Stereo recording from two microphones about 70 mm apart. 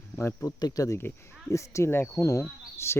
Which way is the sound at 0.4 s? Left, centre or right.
Left.